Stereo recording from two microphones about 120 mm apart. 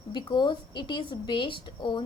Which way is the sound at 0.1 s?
40° left (ahead or behind).